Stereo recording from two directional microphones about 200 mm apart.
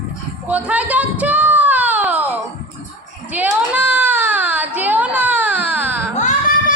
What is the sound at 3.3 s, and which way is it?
Baby cry, 10° right (ahead or behind).